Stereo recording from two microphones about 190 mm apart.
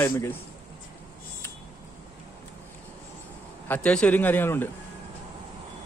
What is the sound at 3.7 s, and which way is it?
A man's voice, 5° left (ahead or behind).